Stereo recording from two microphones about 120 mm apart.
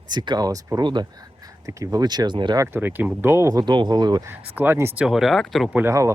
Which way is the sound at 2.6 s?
20° right (ahead or behind).